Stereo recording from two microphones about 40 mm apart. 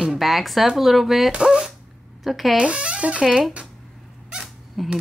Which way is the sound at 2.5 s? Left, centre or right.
Right.